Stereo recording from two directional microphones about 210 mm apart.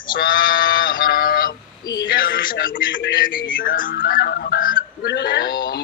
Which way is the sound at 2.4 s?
40° left (ahead or behind).